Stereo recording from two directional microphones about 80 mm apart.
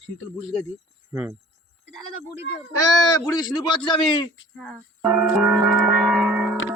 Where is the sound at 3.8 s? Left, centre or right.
Left.